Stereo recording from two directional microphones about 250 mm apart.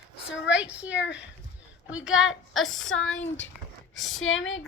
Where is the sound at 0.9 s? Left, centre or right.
Left.